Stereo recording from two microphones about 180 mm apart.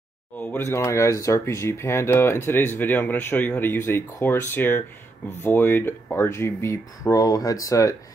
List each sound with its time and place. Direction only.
0.4 s speech: 10° left (ahead or behind)